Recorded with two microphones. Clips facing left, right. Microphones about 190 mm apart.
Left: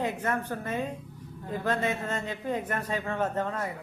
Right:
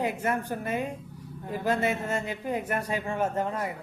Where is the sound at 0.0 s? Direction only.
10° right (ahead or behind).